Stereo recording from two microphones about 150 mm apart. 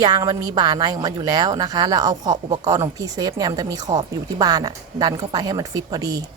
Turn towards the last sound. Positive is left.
turn(degrees=-25)  # may be behind; listen again after turning